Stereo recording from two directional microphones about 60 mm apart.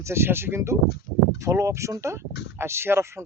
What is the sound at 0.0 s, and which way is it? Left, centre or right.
Speech, right.